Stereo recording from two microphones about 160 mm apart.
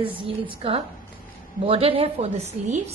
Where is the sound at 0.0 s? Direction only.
35° right (ahead or behind).